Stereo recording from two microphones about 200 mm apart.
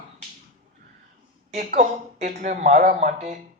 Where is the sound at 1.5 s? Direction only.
35° right (ahead or behind).